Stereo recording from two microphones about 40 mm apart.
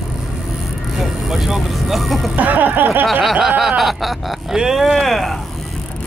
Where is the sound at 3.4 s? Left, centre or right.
Centre.